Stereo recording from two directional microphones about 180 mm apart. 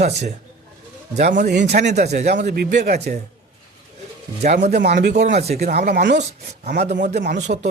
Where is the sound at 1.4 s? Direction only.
70° right (ahead or behind).